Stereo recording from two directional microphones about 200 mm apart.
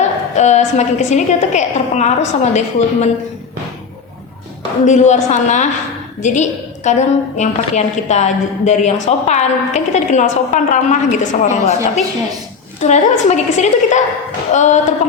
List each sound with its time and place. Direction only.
0.0 s a woman's voice: 35° left (ahead or behind)
4.9 s a woman's voice: 35° left (ahead or behind)